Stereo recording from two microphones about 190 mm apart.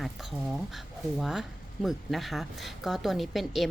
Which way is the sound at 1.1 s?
Centre (ahead or behind).